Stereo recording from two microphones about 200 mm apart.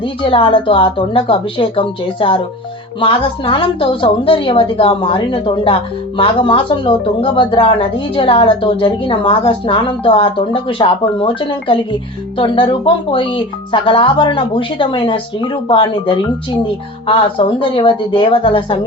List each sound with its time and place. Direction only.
0.0 s a woman's voice: 25° left (ahead or behind)